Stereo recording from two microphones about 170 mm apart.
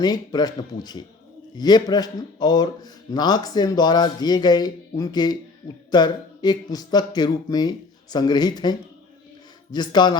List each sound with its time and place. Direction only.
0.0 s speech: 25° left (ahead or behind)
9.7 s speech: 25° left (ahead or behind)